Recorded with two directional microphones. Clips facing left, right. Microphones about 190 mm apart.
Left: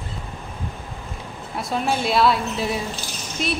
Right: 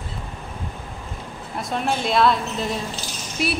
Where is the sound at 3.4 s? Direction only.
5° right (ahead or behind).